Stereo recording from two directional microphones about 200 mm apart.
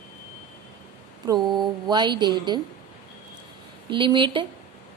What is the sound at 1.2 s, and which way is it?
A woman's voice, 20° right (ahead or behind).